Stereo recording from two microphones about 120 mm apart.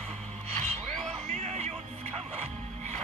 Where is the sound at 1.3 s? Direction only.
65° right (ahead or behind).